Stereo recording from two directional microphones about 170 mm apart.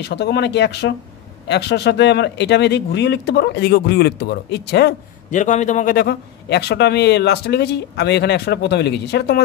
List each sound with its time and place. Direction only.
0.0 s speech: 80° left
5.3 s a man's voice: 45° left (ahead or behind)
5.9 s a man's voice: 75° left (ahead or behind)